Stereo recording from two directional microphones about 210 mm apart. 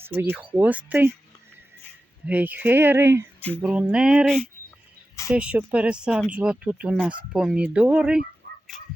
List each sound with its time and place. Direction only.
0.0 s speech: 10° right (ahead or behind)
2.2 s speech: 5° right (ahead or behind)
8.4 s a sound: 50° right (ahead or behind)